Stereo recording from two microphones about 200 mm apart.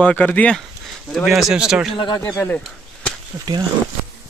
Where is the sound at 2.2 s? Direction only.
10° left (ahead or behind).